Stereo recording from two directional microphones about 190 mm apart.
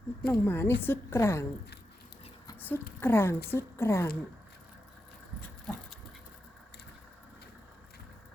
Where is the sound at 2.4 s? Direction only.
10° left (ahead or behind).